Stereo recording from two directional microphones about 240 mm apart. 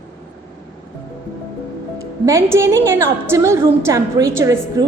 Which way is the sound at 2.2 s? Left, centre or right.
Centre.